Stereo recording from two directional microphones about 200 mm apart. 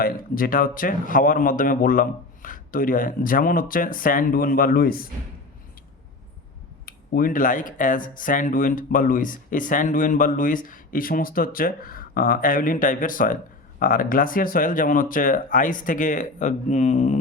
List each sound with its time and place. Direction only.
0.0 s speech: 45° left (ahead or behind)
6.8 s speech: 45° left (ahead or behind)